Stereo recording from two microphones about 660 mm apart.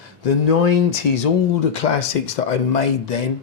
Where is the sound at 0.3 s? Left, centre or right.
Left.